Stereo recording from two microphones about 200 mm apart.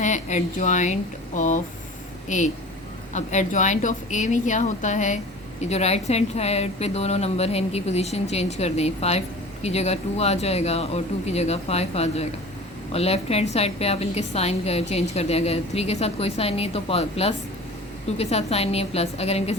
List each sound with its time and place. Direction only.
0.0 s a woman's voice: 35° left (ahead or behind)